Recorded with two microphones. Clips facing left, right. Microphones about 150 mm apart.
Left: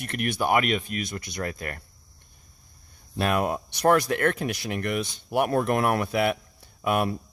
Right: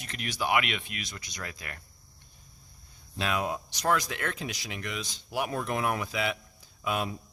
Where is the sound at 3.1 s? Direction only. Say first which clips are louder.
Left 6 dB; 55° left (ahead or behind).